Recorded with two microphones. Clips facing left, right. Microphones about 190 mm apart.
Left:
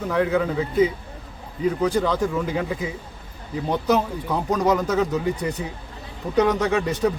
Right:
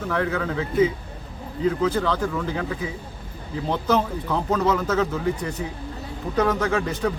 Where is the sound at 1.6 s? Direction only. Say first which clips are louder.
Left 1 dB; 15° left (ahead or behind).